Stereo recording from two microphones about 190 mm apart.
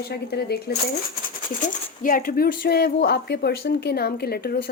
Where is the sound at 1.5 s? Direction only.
45° left (ahead or behind).